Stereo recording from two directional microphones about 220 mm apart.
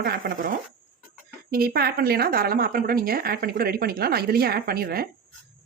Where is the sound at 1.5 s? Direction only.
45° right (ahead or behind).